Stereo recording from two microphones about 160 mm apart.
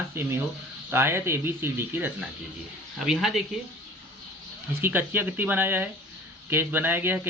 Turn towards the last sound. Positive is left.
turn(degrees=-15)  # may be behind; listen again after turning